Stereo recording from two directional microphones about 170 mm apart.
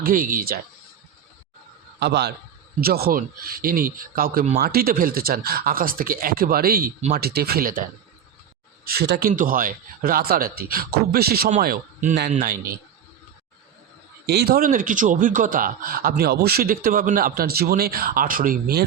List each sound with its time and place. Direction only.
0.0 s speech: 55° right (ahead or behind)
2.0 s a man's voice: 75° right (ahead or behind)
2.8 s speech: 65° right (ahead or behind)
8.8 s speech: 65° right (ahead or behind)
11.4 s a man's voice: 55° right (ahead or behind)
14.3 s speech: 70° right (ahead or behind)